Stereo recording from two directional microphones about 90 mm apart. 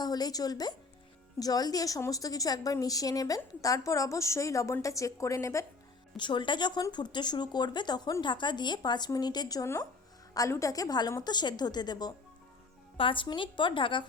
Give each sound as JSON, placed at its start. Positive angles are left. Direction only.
{"t": 0.0, "sound": "a woman's voice", "side_deg": 45}
{"t": 6.1, "sound": "a woman's voice", "side_deg": 60}
{"t": 13.0, "sound": "a woman's voice", "side_deg": 70}